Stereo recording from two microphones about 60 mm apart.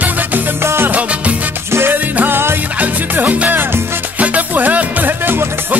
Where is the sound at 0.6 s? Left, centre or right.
Right.